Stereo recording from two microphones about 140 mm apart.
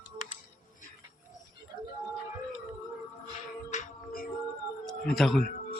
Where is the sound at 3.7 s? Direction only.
70° left (ahead or behind).